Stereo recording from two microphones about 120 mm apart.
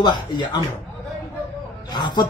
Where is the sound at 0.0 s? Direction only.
40° left (ahead or behind).